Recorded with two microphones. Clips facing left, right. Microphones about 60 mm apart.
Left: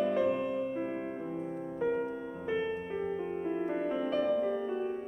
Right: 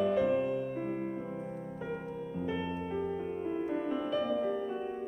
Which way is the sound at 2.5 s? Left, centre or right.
Centre.